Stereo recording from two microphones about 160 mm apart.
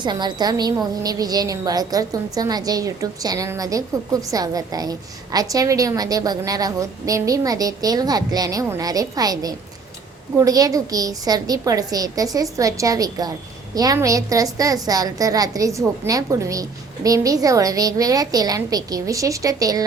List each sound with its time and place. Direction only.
0.0 s a woman's voice: 30° right (ahead or behind)